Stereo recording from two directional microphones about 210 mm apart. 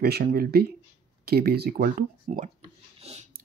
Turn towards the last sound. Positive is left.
turn(degrees=-30)  # may be behind; listen again after turning